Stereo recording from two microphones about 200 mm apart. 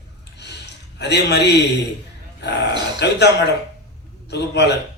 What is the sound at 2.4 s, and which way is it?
Speech, 60° left (ahead or behind).